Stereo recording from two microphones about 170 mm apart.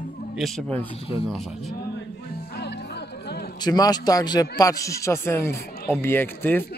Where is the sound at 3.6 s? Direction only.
25° left (ahead or behind).